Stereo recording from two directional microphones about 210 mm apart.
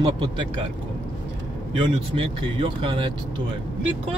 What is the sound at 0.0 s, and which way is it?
Speech, 25° right (ahead or behind).